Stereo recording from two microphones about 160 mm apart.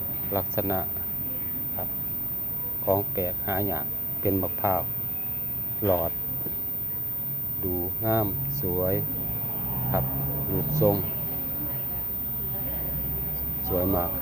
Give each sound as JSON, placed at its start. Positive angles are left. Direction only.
{"t": 0.3, "sound": "speech", "side_deg": -15}
{"t": 2.8, "sound": "speech", "side_deg": -20}
{"t": 7.6, "sound": "a man's voice", "side_deg": -20}
{"t": 13.7, "sound": "speech", "side_deg": -20}